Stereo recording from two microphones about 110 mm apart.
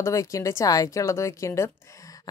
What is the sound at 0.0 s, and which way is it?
A woman's voice, 30° left (ahead or behind).